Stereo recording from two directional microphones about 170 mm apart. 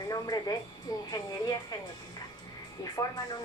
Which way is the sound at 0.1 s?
20° left (ahead or behind).